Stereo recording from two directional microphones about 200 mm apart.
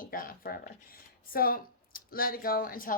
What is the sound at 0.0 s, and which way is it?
Speech, 45° left (ahead or behind).